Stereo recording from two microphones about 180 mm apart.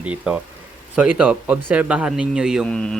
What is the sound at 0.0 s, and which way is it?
Speech, 5° right (ahead or behind).